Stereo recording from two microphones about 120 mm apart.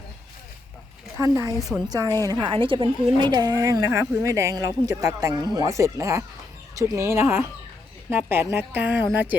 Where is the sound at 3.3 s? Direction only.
30° right (ahead or behind).